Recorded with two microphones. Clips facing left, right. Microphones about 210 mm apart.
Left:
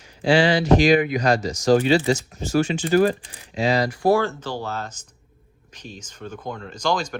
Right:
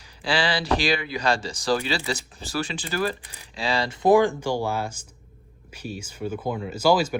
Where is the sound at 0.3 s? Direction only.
35° right (ahead or behind).